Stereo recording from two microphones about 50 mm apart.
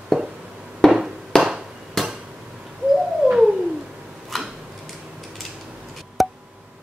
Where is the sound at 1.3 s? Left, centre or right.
Centre.